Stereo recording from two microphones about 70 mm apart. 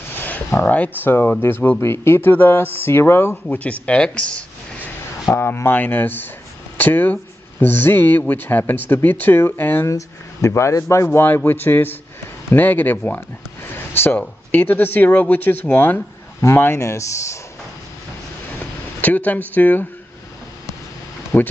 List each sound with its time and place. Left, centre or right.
0.1 s a sound: left
0.7 s speech: left
3.4 s speech: left
5.2 s speech: left
9.8 s speech: left
11.1 s speech: left
18.6 s a sound: left
21.3 s speech: left